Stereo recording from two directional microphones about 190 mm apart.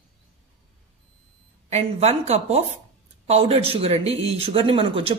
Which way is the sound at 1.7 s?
35° right (ahead or behind).